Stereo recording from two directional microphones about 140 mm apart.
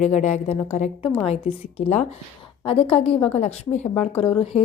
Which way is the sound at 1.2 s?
45° left (ahead or behind).